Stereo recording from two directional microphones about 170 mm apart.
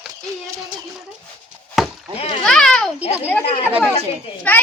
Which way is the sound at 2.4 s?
5° left (ahead or behind).